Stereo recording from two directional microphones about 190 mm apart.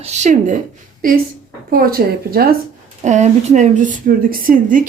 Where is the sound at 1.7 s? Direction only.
50° right (ahead or behind).